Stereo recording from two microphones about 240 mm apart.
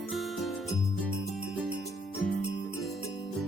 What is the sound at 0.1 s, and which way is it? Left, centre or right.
Music, centre.